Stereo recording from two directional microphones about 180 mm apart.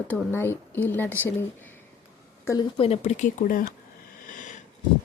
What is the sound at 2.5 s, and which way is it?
Speech, 25° left (ahead or behind).